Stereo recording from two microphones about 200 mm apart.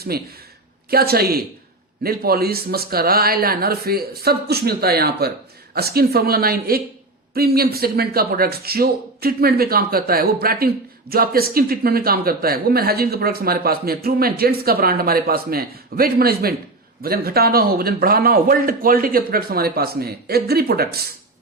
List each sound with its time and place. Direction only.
0.1 s speech: 50° right (ahead or behind)